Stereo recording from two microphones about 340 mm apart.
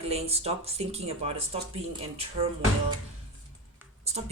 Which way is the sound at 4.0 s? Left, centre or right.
Centre.